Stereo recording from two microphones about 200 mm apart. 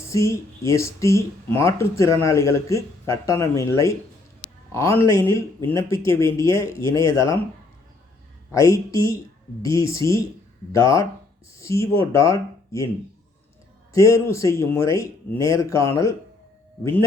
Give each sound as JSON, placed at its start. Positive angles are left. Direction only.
{"t": 0.1, "sound": "speech", "side_deg": 15}
{"t": 8.5, "sound": "speech", "side_deg": 15}
{"t": 13.9, "sound": "speech", "side_deg": 15}